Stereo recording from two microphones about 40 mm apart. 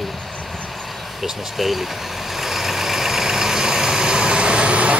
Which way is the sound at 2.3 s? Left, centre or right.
Centre.